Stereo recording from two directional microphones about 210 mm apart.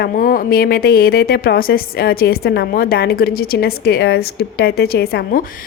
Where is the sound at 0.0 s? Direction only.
45° left (ahead or behind).